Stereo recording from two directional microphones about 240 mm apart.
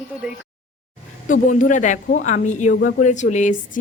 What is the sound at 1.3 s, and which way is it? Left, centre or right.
A woman's voice, left.